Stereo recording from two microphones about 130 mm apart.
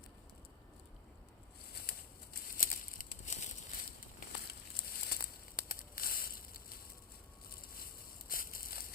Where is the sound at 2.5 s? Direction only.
90° left; by 3.5 s 70° left (ahead or behind).